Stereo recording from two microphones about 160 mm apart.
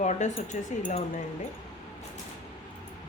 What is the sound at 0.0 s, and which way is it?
Speech, 50° left (ahead or behind).